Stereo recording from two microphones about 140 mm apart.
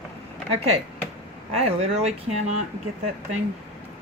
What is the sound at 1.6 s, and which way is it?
Speech, 50° right (ahead or behind).